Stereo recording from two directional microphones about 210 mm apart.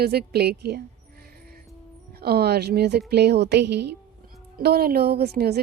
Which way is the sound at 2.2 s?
50° right (ahead or behind).